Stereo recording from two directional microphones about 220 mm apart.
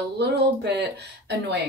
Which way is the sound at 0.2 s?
50° right (ahead or behind).